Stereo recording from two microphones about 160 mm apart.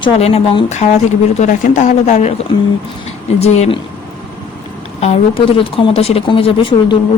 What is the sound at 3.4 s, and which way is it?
Speech, 40° left (ahead or behind).